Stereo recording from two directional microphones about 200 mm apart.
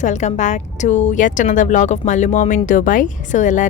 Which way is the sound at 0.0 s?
35° left (ahead or behind).